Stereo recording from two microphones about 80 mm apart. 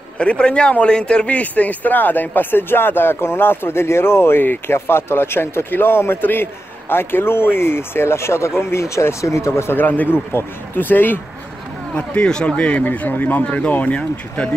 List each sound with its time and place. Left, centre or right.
0.2 s speech: centre